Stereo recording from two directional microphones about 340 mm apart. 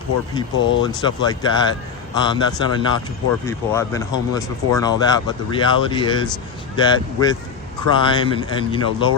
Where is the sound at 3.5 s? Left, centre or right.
Centre.